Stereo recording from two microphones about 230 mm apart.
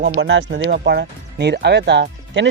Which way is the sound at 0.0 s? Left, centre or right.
Right.